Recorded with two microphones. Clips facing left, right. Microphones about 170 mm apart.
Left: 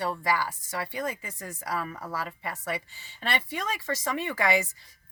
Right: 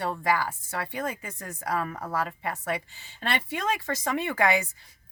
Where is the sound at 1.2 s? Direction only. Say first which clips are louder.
Right 2 dB; 50° right (ahead or behind).